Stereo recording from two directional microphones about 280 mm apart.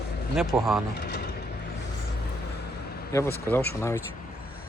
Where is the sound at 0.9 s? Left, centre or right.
Left.